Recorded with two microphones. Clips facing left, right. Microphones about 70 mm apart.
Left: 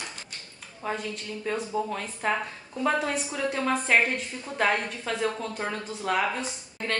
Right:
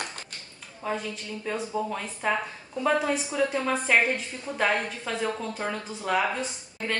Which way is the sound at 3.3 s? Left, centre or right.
Centre.